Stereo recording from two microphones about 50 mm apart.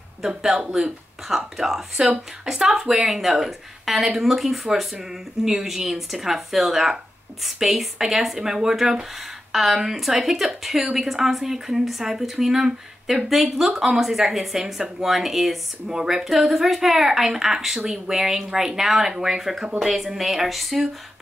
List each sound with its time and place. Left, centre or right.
0.7 s speech: right
1.3 s speech: centre